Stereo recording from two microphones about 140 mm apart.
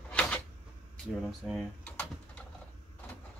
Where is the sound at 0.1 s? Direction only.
10° left (ahead or behind).